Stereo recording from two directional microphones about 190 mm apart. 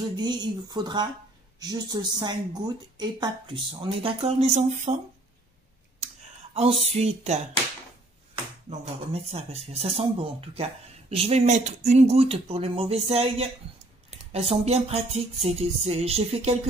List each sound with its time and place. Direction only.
0.1 s speech: 25° right (ahead or behind); by 4.9 s 40° right (ahead or behind)
6.5 s speech: 30° right (ahead or behind)
8.6 s speech: 30° right (ahead or behind)